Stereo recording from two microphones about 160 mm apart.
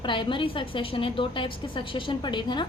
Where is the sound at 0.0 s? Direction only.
30° left (ahead or behind).